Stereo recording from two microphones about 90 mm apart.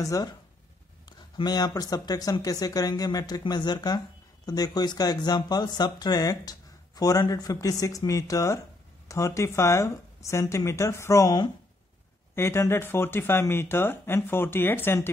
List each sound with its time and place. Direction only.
0.0 s speech: 40° left (ahead or behind)
1.0 s speech: 50° left (ahead or behind); by 11.3 s 30° left (ahead or behind)
12.4 s speech: 30° left (ahead or behind)